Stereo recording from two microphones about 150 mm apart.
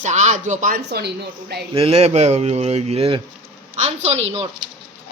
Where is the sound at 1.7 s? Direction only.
40° right (ahead or behind).